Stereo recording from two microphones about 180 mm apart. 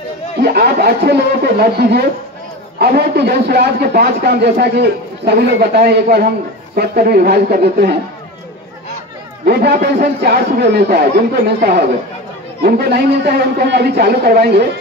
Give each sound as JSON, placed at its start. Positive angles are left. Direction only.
{"t": 0.4, "sound": "a man's voice", "side_deg": -60}
{"t": 9.4, "sound": "a man's voice", "side_deg": -60}